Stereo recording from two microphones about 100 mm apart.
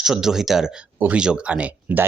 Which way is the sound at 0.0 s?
5° right (ahead or behind).